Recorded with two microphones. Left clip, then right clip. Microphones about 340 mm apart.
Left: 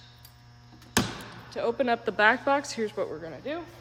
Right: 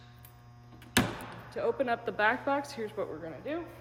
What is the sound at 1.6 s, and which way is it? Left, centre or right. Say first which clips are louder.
A woman's voice: left 4 dB; left.